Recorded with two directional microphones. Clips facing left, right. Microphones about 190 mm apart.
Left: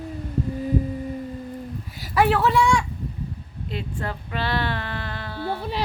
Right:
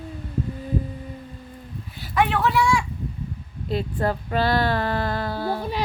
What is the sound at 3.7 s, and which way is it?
Female singing, 40° right (ahead or behind).